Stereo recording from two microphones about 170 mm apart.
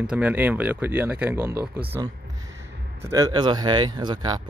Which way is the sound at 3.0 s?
20° right (ahead or behind).